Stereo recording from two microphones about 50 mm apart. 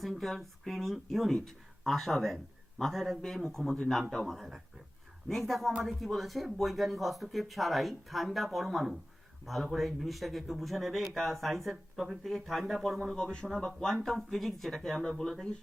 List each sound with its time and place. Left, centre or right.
0.0 s speech: centre
4.4 s speech: centre
13.0 s speech: centre